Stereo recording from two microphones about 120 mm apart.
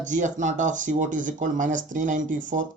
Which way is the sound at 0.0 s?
90° right.